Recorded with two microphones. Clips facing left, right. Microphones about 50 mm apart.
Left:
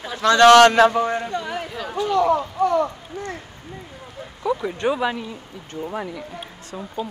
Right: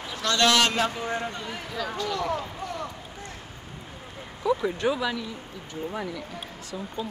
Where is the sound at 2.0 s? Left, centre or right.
Left.